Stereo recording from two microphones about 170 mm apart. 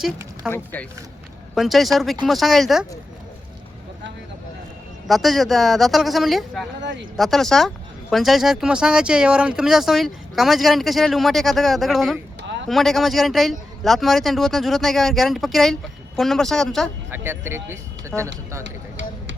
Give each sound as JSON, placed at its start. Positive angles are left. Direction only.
{"t": 0.5, "sound": "speech", "side_deg": 10}
{"t": 1.5, "sound": "speech", "side_deg": 0}
{"t": 5.0, "sound": "speech", "side_deg": 0}
{"t": 12.4, "sound": "a sound", "side_deg": -90}
{"t": 12.6, "sound": "speech", "side_deg": 0}
{"t": 17.1, "sound": "speech", "side_deg": -15}
{"t": 18.1, "sound": "speech", "side_deg": 5}